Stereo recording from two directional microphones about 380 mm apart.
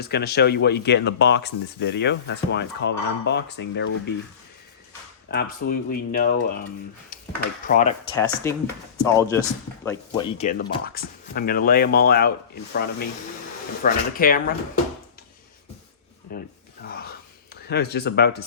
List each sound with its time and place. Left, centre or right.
0.0 s speech: left
5.3 s speech: left
7.7 s speech: centre
16.3 s speech: left
16.8 s a sound: left